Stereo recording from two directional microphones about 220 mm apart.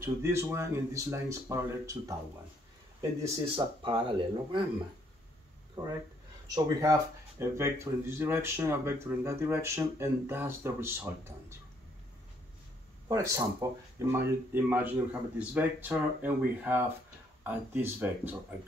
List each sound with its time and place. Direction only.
0.0 s speech: 10° right (ahead or behind)
5.8 s speech: 20° right (ahead or behind)
13.1 s speech: 15° right (ahead or behind)